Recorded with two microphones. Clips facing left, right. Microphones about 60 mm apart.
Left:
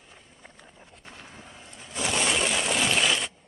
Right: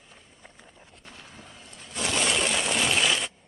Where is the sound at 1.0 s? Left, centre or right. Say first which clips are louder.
Left 1 dB; left.